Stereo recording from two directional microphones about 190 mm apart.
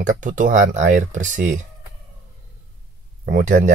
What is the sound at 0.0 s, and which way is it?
Speech, 40° right (ahead or behind).